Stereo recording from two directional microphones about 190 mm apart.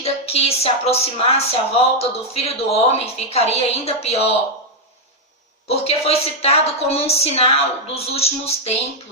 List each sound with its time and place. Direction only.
0.0 s a woman's voice: 30° left (ahead or behind)
5.6 s a woman's voice: 30° left (ahead or behind)